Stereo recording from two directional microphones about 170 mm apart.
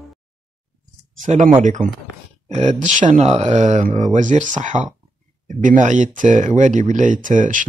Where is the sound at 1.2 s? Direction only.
45° right (ahead or behind).